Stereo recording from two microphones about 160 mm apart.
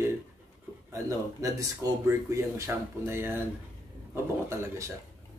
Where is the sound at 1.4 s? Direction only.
20° right (ahead or behind).